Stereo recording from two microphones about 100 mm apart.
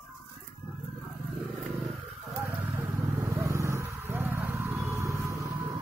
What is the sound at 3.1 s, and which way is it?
Vehicle, 30° right (ahead or behind).